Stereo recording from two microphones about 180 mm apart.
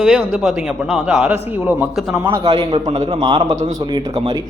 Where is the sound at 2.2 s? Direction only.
30° right (ahead or behind).